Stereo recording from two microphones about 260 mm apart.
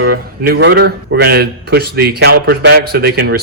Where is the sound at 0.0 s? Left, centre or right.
Right.